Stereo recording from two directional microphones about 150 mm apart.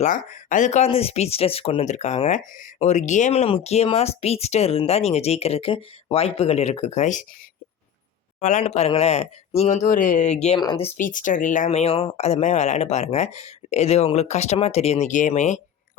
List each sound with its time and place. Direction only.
0.0 s speech: 60° left (ahead or behind)
0.9 s speech: 40° left (ahead or behind)
8.4 s speech: 50° left (ahead or behind)
10.6 s speech: 30° left (ahead or behind)
10.9 s speech: 60° left (ahead or behind)